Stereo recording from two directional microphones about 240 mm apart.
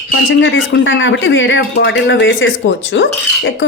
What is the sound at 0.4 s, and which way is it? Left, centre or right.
Speech, left.